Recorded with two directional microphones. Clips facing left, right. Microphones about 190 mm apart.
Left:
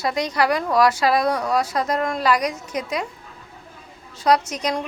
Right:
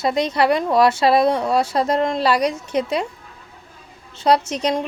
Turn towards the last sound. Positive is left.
turn(degrees=-30)  # may be behind; listen again after turning